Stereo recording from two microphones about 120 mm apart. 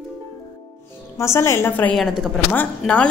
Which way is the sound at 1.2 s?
25° left (ahead or behind).